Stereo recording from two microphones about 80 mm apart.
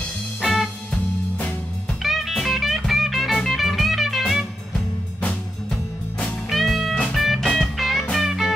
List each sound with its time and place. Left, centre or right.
0.4 s music: centre
2.0 s music: centre
5.2 s music: centre
6.5 s music: centre